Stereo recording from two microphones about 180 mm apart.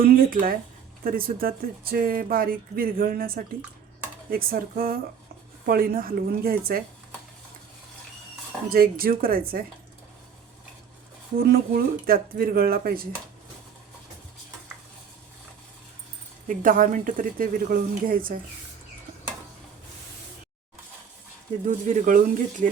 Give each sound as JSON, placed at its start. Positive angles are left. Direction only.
{"t": 0.0, "sound": "speech", "side_deg": -50}
{"t": 8.7, "sound": "speech", "side_deg": -55}
{"t": 11.3, "sound": "speech", "side_deg": -55}
{"t": 16.5, "sound": "speech", "side_deg": -50}
{"t": 21.7, "sound": "speech", "side_deg": -45}